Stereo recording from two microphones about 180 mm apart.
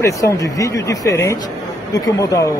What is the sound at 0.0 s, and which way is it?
Speech, 20° left (ahead or behind).